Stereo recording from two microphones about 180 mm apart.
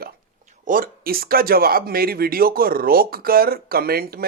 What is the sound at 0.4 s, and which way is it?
Speech, 45° right (ahead or behind).